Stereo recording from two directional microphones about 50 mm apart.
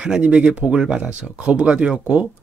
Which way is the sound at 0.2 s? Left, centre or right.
Right.